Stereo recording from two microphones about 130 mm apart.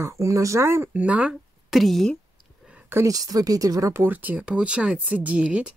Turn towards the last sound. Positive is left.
turn(degrees=-10)  # may be behind; listen again after turning